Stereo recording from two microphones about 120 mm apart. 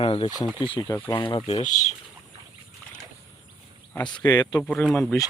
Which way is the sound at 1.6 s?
90° left.